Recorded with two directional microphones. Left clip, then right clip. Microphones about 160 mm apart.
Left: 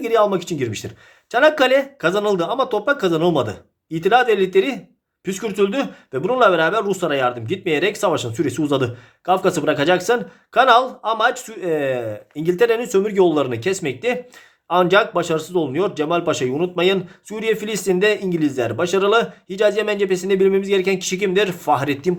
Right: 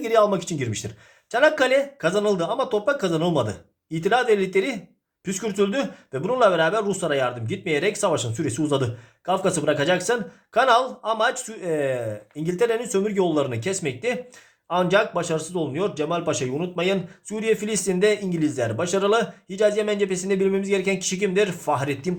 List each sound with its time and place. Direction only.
0.0 s speech: 10° left (ahead or behind)